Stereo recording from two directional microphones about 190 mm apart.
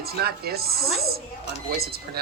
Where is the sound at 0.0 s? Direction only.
55° right (ahead or behind).